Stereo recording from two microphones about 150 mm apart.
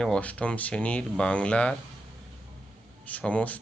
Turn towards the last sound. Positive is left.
turn(degrees=10)  # may be behind; listen again after turning